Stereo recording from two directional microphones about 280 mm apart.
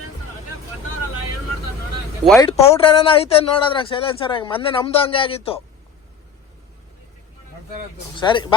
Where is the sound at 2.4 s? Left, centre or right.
Centre.